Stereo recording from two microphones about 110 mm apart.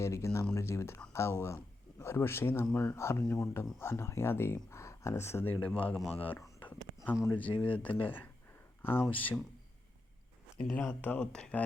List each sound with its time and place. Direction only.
0.0 s speech: 25° left (ahead or behind)
6.6 s a sound: 15° left (ahead or behind)
7.3 s speech: 15° left (ahead or behind)
11.0 s speech: 15° left (ahead or behind)